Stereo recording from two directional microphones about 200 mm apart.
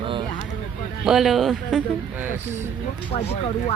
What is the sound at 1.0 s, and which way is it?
Speech, centre (ahead or behind).